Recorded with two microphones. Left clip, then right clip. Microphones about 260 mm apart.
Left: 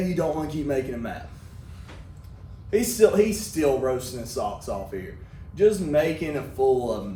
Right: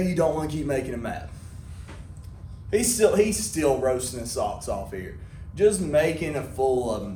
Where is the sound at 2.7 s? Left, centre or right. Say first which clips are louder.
Left 1 dB; right.